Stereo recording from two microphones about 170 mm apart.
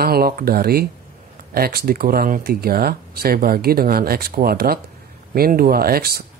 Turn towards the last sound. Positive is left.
turn(degrees=-65)  # may be behind; listen again after turning